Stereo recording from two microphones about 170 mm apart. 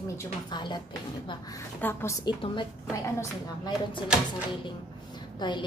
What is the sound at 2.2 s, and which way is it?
A woman's voice, 25° left (ahead or behind).